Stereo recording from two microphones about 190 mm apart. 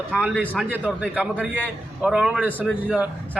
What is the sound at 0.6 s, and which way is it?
A man's voice, 10° right (ahead or behind).